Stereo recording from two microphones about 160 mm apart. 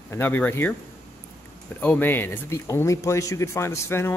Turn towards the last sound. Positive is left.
turn(degrees=15)  # may be behind; listen again after turning